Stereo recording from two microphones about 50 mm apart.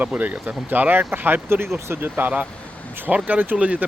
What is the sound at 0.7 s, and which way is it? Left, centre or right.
Speech, right.